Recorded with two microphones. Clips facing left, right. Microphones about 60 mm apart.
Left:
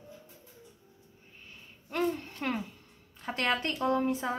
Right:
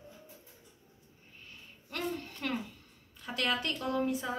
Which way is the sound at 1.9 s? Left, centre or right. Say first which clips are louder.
Left 6 dB; left.